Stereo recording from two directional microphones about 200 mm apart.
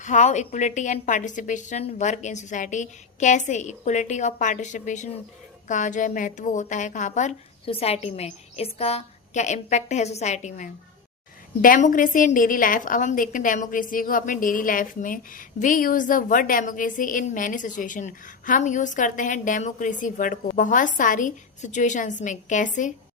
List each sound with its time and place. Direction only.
0.0 s a woman's voice: 35° left (ahead or behind)